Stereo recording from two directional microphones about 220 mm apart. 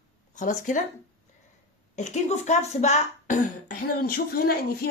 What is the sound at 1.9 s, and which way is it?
Speech, 30° left (ahead or behind).